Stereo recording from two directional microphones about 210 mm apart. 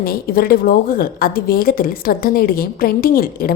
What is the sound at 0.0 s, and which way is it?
A woman's voice, 45° left (ahead or behind).